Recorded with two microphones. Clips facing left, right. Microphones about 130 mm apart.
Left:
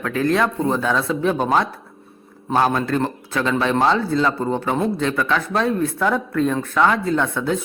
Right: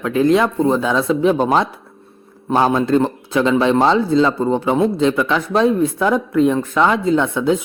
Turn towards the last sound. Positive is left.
turn(degrees=-15)  # may be behind; listen again after turning